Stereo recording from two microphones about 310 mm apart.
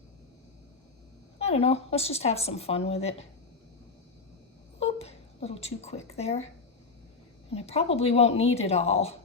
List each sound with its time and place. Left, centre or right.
1.4 s speech: centre
4.8 s a sound: centre
7.5 s speech: centre